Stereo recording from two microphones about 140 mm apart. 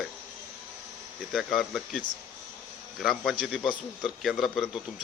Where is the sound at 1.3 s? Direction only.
Centre (ahead or behind).